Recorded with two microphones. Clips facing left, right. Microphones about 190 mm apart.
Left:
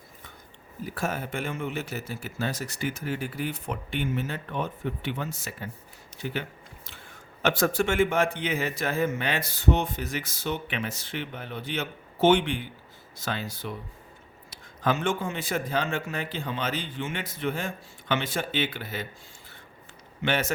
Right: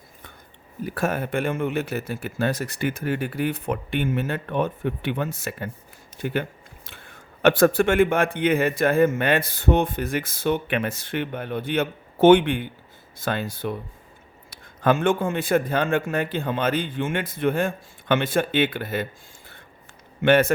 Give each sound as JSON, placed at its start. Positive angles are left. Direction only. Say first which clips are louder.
{"t": 0.9, "sound": "a man's voice", "louder": "right 6 dB", "side_deg": -60}
{"t": 7.4, "sound": "a man's voice", "louder": "right 7 dB", "side_deg": -55}
{"t": 20.2, "sound": "a man's voice", "louder": "right 10 dB", "side_deg": -55}